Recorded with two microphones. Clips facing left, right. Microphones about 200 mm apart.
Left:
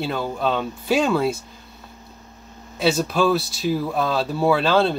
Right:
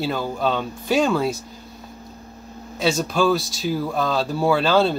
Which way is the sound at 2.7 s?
5° left (ahead or behind).